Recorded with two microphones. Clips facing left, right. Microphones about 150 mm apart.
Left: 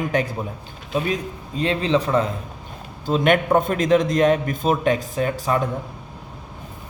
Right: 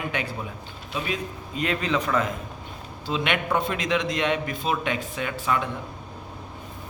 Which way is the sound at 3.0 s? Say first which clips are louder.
Left 8 dB; 45° left (ahead or behind).